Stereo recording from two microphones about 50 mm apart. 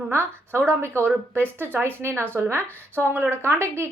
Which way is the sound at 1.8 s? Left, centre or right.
Right.